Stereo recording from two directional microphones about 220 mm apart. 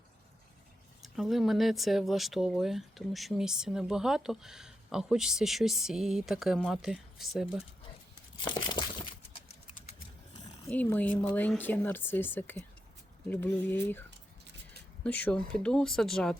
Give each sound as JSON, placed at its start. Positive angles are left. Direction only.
{"t": 1.0, "sound": "speech", "side_deg": 0}
{"t": 8.4, "sound": "crumpling", "side_deg": 20}
{"t": 10.7, "sound": "speech", "side_deg": 5}
{"t": 15.0, "sound": "speech", "side_deg": 5}